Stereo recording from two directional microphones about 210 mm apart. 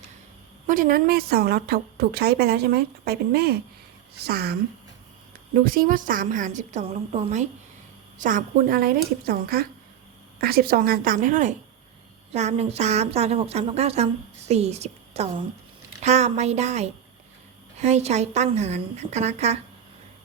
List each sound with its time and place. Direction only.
0.7 s a woman's voice: 40° right (ahead or behind)
5.6 s a woman's voice: 45° right (ahead or behind)